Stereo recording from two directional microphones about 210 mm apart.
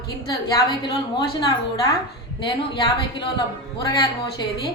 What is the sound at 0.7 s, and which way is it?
A woman's voice, 20° left (ahead or behind).